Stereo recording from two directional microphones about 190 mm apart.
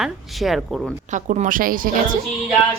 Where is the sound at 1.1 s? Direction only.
40° right (ahead or behind).